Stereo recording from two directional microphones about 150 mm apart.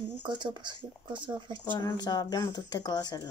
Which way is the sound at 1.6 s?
30° left (ahead or behind).